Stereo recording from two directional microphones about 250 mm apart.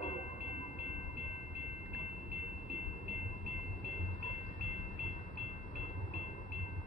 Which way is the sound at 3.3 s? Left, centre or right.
Left.